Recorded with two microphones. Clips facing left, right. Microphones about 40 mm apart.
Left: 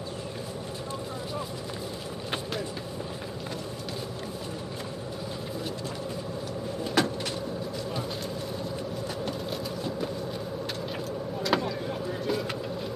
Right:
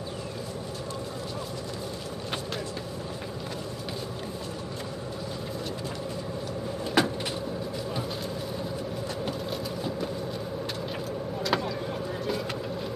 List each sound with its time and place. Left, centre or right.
7.0 s cupboard open or close: centre
9.5 s a sound: centre
11.4 s vehicle: centre